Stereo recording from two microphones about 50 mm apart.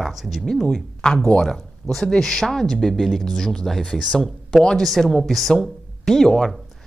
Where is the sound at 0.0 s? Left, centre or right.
Centre.